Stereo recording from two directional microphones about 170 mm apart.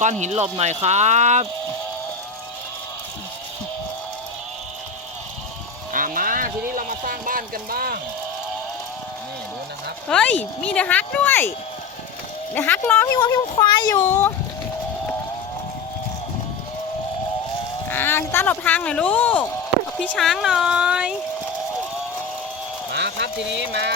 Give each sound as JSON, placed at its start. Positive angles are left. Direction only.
{"t": 0.0, "sound": "speech", "side_deg": -45}
{"t": 5.9, "sound": "a sound", "side_deg": -55}
{"t": 10.1, "sound": "speech", "side_deg": 5}
{"t": 12.5, "sound": "speech", "side_deg": 10}
{"t": 13.1, "sound": "speech", "side_deg": 25}
{"t": 13.9, "sound": "speech", "side_deg": 15}
{"t": 17.9, "sound": "speech", "side_deg": 15}
{"t": 22.9, "sound": "a sound", "side_deg": -90}